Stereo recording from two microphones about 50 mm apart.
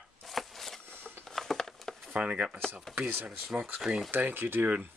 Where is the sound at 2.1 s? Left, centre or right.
Right.